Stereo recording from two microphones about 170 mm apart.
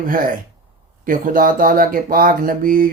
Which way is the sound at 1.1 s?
55° right (ahead or behind).